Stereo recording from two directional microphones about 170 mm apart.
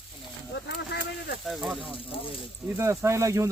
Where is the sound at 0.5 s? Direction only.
90° left.